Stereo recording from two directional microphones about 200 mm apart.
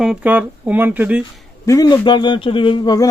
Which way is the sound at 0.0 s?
5° right (ahead or behind).